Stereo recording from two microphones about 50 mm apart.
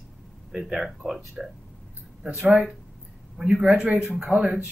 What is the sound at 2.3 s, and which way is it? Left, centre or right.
Speech, right.